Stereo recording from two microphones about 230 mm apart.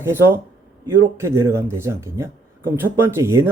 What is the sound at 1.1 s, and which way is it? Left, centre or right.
Speech, centre.